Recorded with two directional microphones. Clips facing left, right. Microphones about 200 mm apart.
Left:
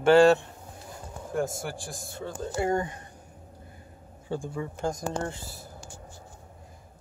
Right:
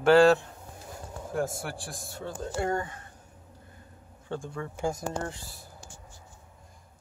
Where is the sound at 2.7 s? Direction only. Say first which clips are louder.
Left 5 dB; 15° left (ahead or behind).